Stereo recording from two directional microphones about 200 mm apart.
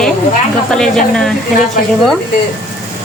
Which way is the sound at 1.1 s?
5° left (ahead or behind).